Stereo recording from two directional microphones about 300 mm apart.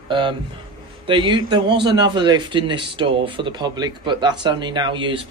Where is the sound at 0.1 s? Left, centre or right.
Centre.